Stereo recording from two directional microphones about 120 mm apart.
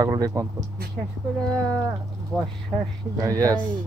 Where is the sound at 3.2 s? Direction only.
30° right (ahead or behind).